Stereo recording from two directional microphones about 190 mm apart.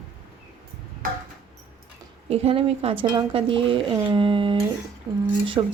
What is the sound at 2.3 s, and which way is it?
Dishes, 30° right (ahead or behind).